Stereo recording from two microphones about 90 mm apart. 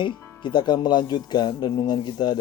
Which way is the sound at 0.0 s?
60° left (ahead or behind).